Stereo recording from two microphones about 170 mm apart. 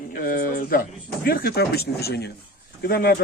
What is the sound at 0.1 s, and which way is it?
Speech, 55° left (ahead or behind).